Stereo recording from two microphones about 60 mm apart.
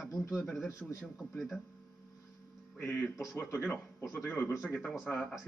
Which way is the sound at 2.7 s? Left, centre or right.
Left.